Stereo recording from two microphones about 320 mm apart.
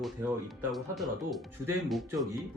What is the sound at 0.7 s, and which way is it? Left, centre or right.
Speech, centre.